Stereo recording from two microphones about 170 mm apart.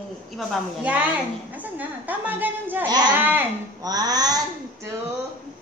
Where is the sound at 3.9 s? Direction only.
20° right (ahead or behind).